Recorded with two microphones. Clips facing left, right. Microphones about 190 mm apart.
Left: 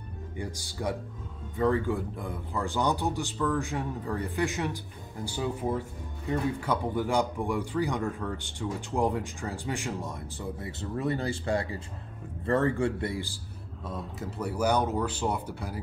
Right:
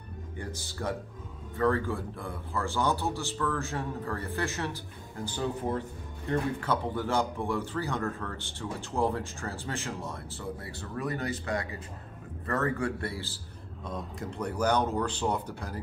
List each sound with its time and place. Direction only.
0.4 s speech: 15° left (ahead or behind)
13.8 s speech: 5° left (ahead or behind)